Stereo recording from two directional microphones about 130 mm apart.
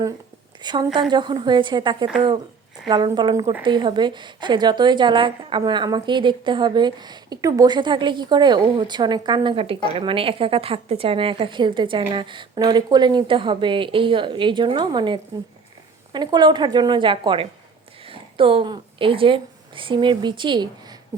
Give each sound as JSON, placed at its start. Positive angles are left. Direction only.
{"t": 0.6, "sound": "a woman's voice", "side_deg": -35}